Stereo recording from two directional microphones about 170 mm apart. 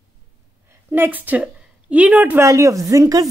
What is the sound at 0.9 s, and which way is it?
A woman's voice, 10° right (ahead or behind).